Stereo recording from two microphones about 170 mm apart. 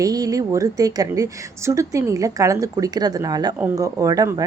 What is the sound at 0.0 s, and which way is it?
A woman's voice, 20° right (ahead or behind).